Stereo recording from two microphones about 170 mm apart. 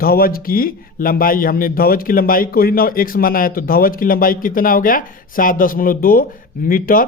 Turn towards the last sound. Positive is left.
turn(degrees=55)  # may be behind; listen again after turning